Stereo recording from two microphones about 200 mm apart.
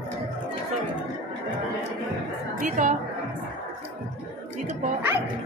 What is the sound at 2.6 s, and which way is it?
Speech, 40° right (ahead or behind).